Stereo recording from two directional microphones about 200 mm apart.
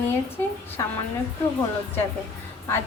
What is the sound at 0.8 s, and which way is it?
Speech, 15° left (ahead or behind).